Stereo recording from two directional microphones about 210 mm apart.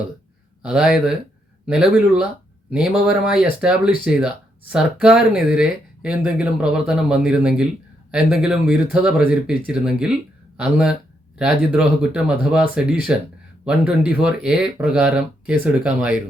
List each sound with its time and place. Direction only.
0.6 s speech: 5° right (ahead or behind)